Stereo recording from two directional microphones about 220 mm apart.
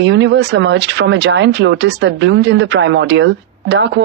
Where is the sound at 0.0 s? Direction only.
55° right (ahead or behind).